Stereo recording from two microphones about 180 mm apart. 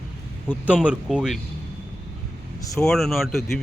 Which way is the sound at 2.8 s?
Centre (ahead or behind).